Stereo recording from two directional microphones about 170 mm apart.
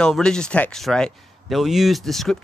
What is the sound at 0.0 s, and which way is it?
Speech, 5° left (ahead or behind).